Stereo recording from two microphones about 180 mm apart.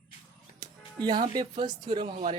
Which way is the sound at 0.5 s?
25° right (ahead or behind).